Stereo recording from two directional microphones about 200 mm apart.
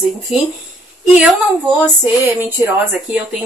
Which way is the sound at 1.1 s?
Centre (ahead or behind).